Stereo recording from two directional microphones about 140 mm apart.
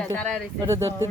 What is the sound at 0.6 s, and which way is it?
Speech, 20° right (ahead or behind).